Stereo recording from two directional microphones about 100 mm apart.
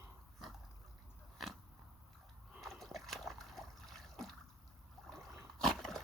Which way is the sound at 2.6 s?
Centre (ahead or behind).